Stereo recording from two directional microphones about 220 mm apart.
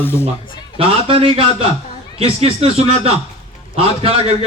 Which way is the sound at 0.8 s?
25° right (ahead or behind).